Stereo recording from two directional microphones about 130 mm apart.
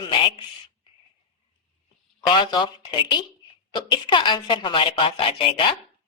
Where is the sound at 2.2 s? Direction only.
35° left (ahead or behind).